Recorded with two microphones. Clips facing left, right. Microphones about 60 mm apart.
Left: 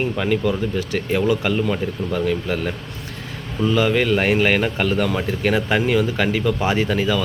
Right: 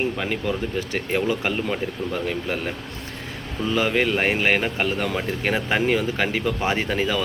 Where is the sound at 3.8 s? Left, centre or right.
Centre.